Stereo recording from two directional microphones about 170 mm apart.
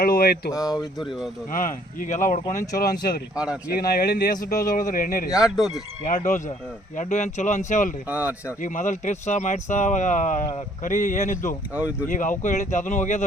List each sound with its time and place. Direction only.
0.0 s a man's voice: 60° left (ahead or behind)
3.3 s speech: 5° right (ahead or behind)
3.7 s a man's voice: 60° left (ahead or behind)
5.3 s speech: 5° right (ahead or behind)
6.1 s speech: 50° left (ahead or behind)
8.0 s speech: 10° right (ahead or behind)
8.6 s speech: 50° left (ahead or behind)